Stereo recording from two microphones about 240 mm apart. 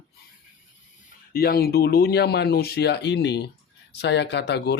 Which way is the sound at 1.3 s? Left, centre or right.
Left.